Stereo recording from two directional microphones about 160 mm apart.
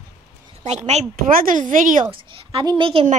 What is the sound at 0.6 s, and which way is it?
Speech, 45° right (ahead or behind).